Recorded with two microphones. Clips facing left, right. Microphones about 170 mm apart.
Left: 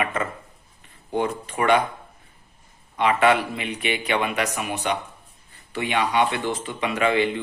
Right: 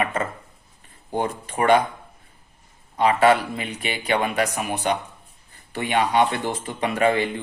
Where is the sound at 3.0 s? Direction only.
35° right (ahead or behind).